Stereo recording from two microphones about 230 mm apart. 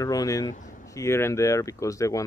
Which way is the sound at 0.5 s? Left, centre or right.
Left.